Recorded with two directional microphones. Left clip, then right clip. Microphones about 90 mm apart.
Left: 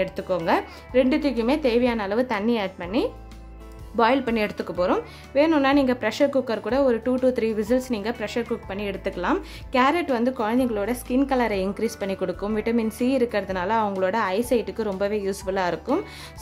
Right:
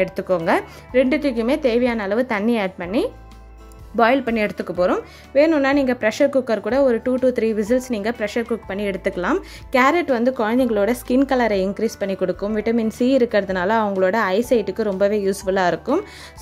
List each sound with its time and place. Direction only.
0.0 s a woman's voice: 45° right (ahead or behind)
3.9 s a woman's voice: 30° right (ahead or behind); by 10.0 s 55° right (ahead or behind)
10.0 s a woman's voice: 40° right (ahead or behind); by 11.1 s 65° right (ahead or behind)
11.1 s speech: 35° right (ahead or behind)
12.9 s a woman's voice: 50° right (ahead or behind)